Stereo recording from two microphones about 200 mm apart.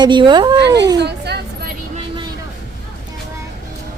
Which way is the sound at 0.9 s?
55° right (ahead or behind).